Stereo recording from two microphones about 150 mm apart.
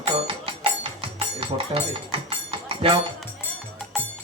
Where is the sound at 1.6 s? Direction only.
35° right (ahead or behind).